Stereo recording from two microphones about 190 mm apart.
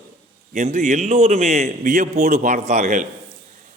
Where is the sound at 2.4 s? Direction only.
35° right (ahead or behind).